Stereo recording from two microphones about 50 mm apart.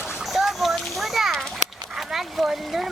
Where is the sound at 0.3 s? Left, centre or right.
Centre.